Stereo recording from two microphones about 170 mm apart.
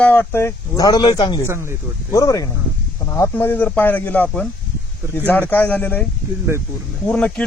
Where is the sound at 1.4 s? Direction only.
15° right (ahead or behind).